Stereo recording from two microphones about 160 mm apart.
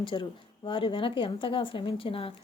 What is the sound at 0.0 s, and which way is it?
A woman's voice, 30° left (ahead or behind).